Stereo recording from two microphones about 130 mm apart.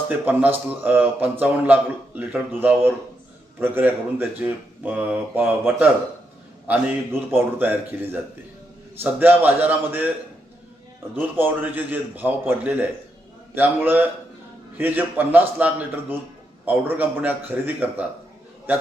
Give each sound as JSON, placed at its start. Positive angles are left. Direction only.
{"t": 0.3, "sound": "a man's voice", "side_deg": -15}
{"t": 11.1, "sound": "a man's voice", "side_deg": -15}